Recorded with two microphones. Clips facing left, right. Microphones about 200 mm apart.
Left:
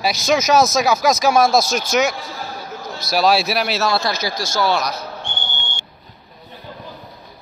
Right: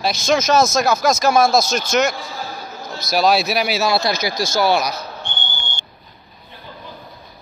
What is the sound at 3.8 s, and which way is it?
Speech, 10° right (ahead or behind).